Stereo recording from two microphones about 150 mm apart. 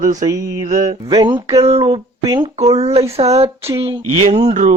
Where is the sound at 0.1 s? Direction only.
25° right (ahead or behind).